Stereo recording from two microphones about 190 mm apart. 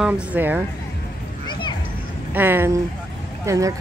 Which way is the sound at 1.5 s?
25° left (ahead or behind).